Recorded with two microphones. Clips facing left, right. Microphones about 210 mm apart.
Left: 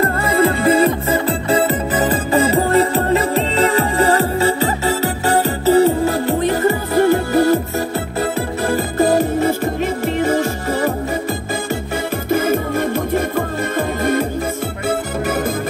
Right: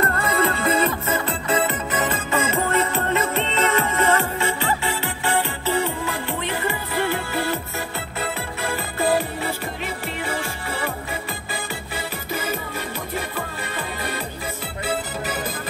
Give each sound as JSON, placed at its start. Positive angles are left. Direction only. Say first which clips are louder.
{"t": 0.0, "sound": "music", "louder": "left 6 dB", "side_deg": 30}
{"t": 12.3, "sound": "music", "louder": "left 12 dB", "side_deg": 50}